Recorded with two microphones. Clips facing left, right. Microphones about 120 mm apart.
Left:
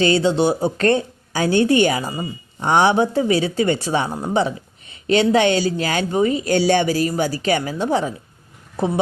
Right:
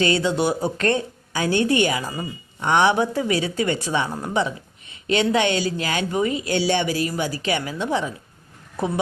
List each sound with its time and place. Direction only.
0.0 s speech: 30° left (ahead or behind)